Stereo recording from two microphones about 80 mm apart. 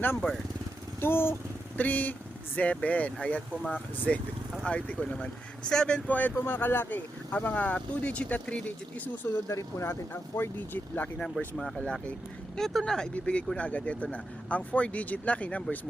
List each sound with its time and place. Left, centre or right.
1.0 s a sound: left
2.6 s speech: centre
9.2 s speech: left
11.8 s speech: centre